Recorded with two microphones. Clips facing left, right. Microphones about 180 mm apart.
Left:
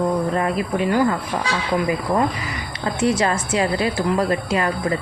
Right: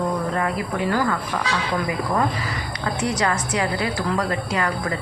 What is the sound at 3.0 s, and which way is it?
A woman's voice, 25° left (ahead or behind).